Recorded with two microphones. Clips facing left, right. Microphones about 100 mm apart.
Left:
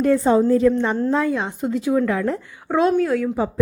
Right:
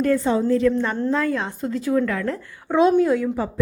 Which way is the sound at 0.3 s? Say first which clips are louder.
Left 3 dB; 30° left (ahead or behind).